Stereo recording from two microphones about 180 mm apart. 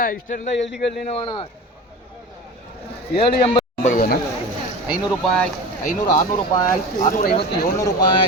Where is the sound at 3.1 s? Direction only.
30° left (ahead or behind).